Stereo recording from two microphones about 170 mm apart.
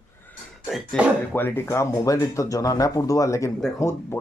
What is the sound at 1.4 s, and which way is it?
Speech, 15° left (ahead or behind).